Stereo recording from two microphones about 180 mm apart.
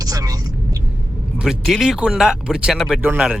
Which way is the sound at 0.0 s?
20° right (ahead or behind).